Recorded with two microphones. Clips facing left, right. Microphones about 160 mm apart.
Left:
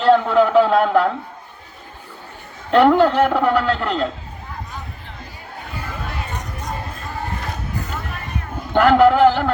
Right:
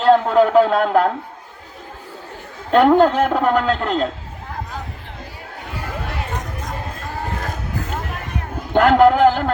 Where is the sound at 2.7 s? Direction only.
45° right (ahead or behind).